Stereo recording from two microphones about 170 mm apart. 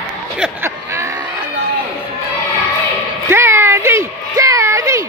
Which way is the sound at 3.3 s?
15° right (ahead or behind).